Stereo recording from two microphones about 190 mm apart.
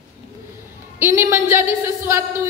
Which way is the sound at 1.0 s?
15° right (ahead or behind).